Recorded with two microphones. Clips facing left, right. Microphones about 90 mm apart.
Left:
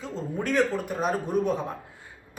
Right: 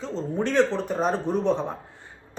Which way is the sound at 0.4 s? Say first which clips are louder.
Right 2 dB; 10° left (ahead or behind).